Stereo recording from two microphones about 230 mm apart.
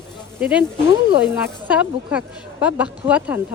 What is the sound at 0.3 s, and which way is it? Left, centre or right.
Speech, centre.